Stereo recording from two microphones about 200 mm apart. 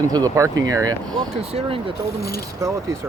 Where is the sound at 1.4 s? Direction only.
30° right (ahead or behind).